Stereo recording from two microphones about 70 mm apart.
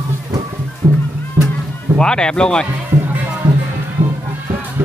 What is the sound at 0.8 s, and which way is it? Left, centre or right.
Music, right.